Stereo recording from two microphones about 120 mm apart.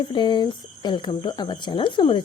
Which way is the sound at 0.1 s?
40° left (ahead or behind).